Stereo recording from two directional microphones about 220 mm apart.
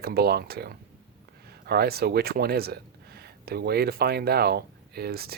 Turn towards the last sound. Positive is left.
turn(degrees=-45)  # may be behind; listen again after turning